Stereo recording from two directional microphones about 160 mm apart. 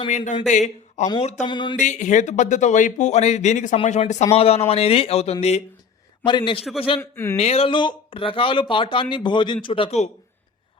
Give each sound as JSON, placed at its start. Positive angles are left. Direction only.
{"t": 0.1, "sound": "speech", "side_deg": 50}
{"t": 1.5, "sound": "a sound", "side_deg": 30}
{"t": 1.7, "sound": "speech", "side_deg": 50}
{"t": 6.2, "sound": "speech", "side_deg": 30}
{"t": 7.0, "sound": "speech", "side_deg": 15}
{"t": 7.3, "sound": "speech", "side_deg": 40}